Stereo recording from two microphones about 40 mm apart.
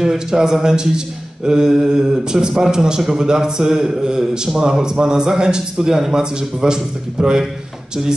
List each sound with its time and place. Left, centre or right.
0.0 s speech: centre